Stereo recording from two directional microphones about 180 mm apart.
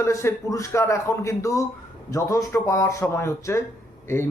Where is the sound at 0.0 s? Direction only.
15° left (ahead or behind).